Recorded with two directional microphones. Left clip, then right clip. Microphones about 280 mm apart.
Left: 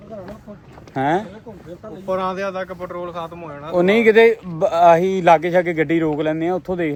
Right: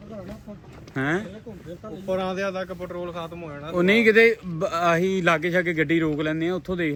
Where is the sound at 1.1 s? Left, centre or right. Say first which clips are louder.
Left 6 dB; centre.